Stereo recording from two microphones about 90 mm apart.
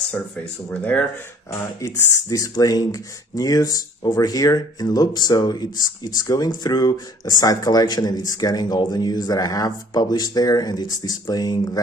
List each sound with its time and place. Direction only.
0.7 s speech: 15° left (ahead or behind)
1.6 s speech: 30° left (ahead or behind)